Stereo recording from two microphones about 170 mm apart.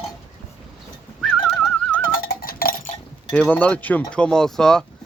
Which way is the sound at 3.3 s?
10° left (ahead or behind).